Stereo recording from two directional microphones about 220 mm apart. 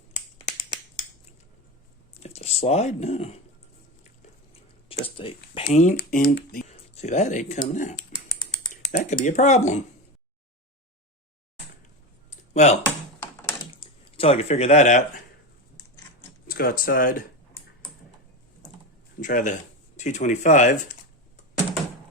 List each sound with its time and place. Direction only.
2.2 s speech: 30° left (ahead or behind)
5.0 s speech: 25° left (ahead or behind); by 6.7 s 40° left (ahead or behind)
6.7 s speech: 30° left (ahead or behind)
12.3 s a sound: 30° left (ahead or behind)
14.2 s a man's voice: 25° left (ahead or behind)
16.5 s speech: 40° left (ahead or behind)
19.2 s speech: 35° left (ahead or behind)